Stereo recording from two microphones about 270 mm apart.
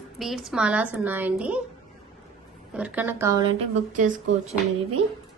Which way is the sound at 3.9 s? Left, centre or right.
Right.